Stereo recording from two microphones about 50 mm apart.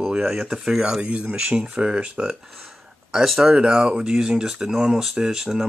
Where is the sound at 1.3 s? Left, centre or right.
Centre.